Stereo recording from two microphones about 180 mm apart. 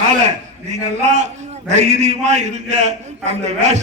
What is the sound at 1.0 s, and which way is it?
A man's voice, 40° right (ahead or behind).